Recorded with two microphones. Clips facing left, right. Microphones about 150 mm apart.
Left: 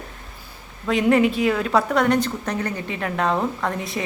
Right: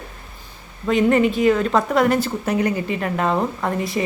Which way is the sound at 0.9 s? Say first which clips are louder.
Right 1 dB; centre (ahead or behind).